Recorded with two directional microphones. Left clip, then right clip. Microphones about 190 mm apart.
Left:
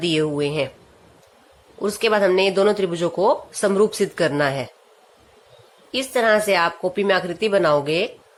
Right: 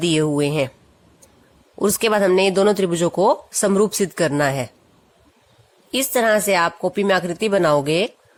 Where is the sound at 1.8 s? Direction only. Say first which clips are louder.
Right 1 dB; 40° right (ahead or behind).